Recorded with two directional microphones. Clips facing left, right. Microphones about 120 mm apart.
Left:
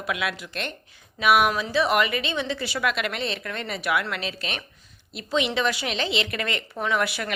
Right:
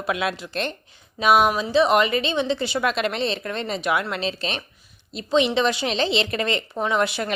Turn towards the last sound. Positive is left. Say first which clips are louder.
# right 3 dB
turn(degrees=-25)  # may be behind; listen again after turning